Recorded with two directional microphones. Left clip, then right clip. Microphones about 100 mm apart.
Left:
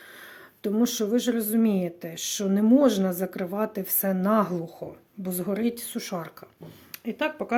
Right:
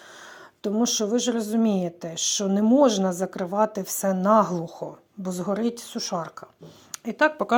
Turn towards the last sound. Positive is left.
turn(degrees=-35)  # may be behind; listen again after turning